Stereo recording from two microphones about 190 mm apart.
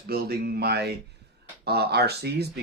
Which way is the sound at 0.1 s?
55° right (ahead or behind).